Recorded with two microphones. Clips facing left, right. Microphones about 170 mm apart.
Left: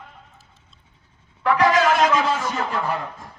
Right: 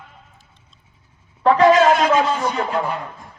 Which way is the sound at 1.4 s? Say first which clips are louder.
Right 5 dB; 25° right (ahead or behind).